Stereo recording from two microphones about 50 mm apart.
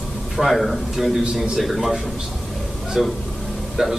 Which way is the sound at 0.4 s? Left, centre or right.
Centre.